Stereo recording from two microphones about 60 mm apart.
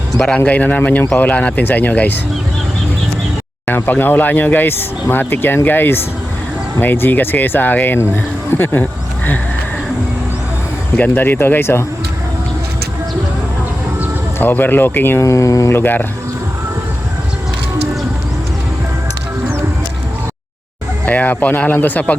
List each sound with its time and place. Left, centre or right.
0.3 s speech: left
3.7 s speech: left
10.9 s speech: left
14.3 s speech: left
15.2 s speech: left
15.7 s speech: left
21.0 s speech: left